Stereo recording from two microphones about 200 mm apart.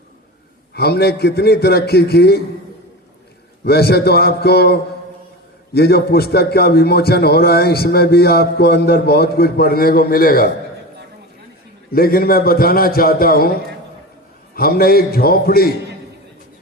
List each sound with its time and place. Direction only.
0.7 s a man's voice: 55° left (ahead or behind)
3.6 s a man's voice: 50° left (ahead or behind)
11.9 s a man's voice: 50° left (ahead or behind)